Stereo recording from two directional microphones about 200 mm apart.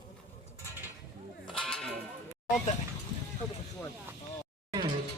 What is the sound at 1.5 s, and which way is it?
Sheep, centre (ahead or behind).